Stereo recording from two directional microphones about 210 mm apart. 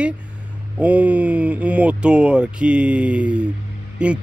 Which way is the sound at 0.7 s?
5° right (ahead or behind).